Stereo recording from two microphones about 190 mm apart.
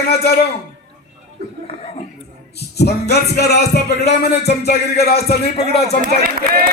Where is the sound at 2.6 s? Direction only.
60° left (ahead or behind).